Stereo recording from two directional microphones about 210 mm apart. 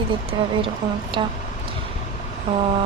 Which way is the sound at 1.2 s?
25° right (ahead or behind).